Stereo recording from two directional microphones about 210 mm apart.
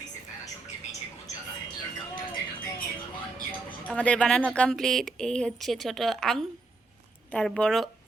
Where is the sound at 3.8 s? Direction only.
5° left (ahead or behind).